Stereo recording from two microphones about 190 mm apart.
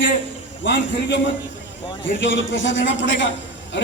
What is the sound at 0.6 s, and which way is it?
A man's voice, 70° left (ahead or behind).